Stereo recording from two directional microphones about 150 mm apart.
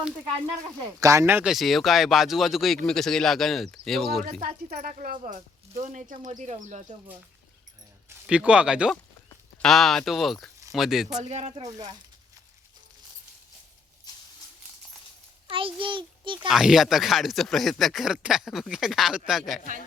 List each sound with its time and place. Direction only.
0.9 s speech: 20° right (ahead or behind)
1.5 s speech: centre (ahead or behind)
4.4 s speech: 70° right (ahead or behind); by 6.8 s 50° right (ahead or behind)
8.3 s speech: 5° right (ahead or behind)
11.2 s speech: 50° right (ahead or behind)
11.6 s speech: 25° right (ahead or behind)
15.4 s a child's voice: 35° right (ahead or behind)
16.5 s speech: 5° right (ahead or behind)